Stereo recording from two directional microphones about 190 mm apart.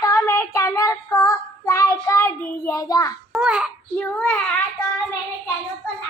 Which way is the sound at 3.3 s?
5° right (ahead or behind).